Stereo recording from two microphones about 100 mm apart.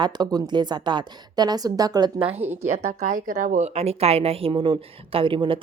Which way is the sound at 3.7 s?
90° right.